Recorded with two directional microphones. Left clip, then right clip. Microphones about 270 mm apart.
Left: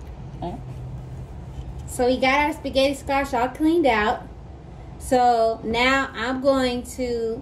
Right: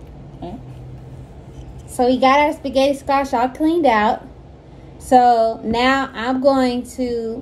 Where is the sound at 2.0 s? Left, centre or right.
Centre.